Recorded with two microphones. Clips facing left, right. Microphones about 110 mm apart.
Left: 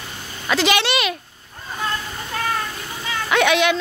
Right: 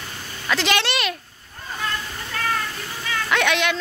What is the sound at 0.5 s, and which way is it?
Speech, 5° left (ahead or behind).